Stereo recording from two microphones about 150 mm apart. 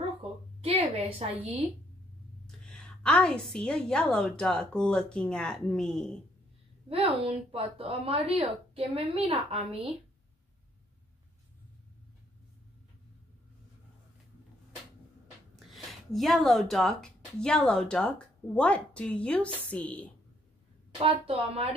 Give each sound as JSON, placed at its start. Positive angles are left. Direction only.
{"t": 0.6, "sound": "a woman's voice", "side_deg": -40}
{"t": 2.4, "sound": "a woman's voice", "side_deg": 5}
{"t": 6.9, "sound": "a woman's voice", "side_deg": -40}
{"t": 15.7, "sound": "a woman's voice", "side_deg": 0}
{"t": 21.0, "sound": "a woman's voice", "side_deg": -40}